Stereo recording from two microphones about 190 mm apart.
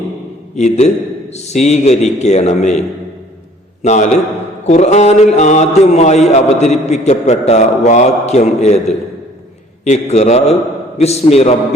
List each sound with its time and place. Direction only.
0.5 s mantra: 35° left (ahead or behind)
3.8 s mantra: 40° left (ahead or behind)
9.8 s mantra: 35° left (ahead or behind)